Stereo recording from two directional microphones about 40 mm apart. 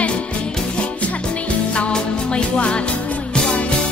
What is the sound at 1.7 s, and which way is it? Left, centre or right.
Music, left.